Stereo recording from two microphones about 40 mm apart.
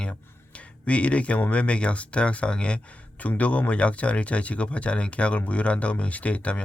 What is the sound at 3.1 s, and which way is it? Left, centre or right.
Speech, left.